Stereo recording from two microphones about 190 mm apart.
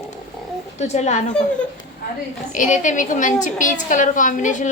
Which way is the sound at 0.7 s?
35° left (ahead or behind).